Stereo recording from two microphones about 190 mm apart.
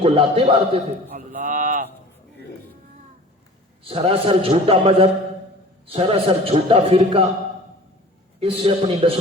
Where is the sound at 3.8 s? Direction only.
30° right (ahead or behind).